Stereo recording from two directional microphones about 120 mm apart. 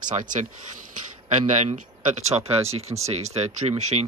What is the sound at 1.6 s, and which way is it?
Speech, 65° right (ahead or behind).